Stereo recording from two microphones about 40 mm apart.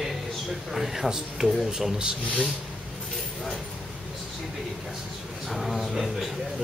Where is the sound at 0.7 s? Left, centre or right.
Centre.